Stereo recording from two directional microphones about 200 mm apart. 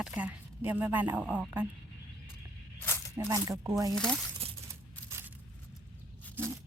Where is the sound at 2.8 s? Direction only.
10° left (ahead or behind).